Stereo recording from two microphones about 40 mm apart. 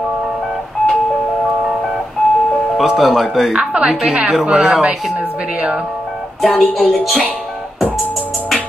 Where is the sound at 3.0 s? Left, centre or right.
Centre.